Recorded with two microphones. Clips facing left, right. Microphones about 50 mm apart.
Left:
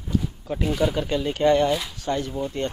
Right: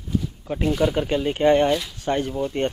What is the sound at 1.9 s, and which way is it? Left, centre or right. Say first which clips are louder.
Speech: right 3 dB; right.